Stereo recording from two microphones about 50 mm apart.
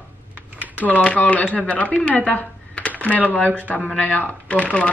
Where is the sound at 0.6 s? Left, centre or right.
Left.